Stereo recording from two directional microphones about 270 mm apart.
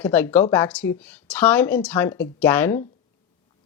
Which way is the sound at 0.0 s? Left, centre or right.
Centre.